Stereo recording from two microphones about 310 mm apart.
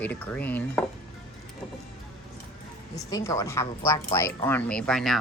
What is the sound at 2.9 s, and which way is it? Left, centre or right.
Speech, centre.